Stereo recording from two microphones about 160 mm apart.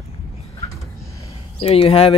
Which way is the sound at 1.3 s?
40° left (ahead or behind).